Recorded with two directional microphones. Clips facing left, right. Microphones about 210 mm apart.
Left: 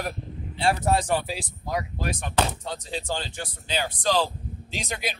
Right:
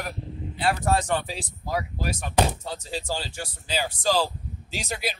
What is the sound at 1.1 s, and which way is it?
Speech, centre (ahead or behind).